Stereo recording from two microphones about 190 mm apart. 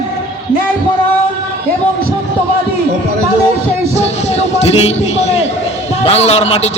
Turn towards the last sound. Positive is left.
turn(degrees=35)  # may be behind; listen again after turning